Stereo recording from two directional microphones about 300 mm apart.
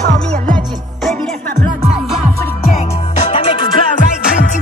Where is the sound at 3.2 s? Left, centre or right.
Centre.